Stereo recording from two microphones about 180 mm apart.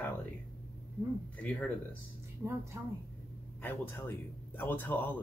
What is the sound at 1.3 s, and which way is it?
Speech, 5° left (ahead or behind).